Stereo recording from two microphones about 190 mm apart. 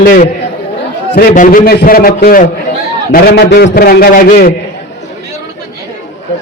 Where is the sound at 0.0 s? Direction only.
50° left (ahead or behind).